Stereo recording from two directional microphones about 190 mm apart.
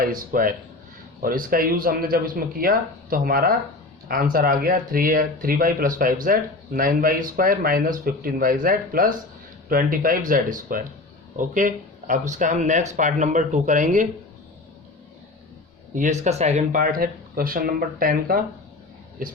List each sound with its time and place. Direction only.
0.0 s speech: 45° right (ahead or behind)
16.0 s speech: 40° right (ahead or behind)